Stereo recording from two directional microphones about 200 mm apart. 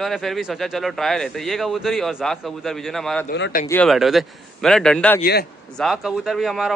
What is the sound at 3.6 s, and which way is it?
Speech, 5° left (ahead or behind).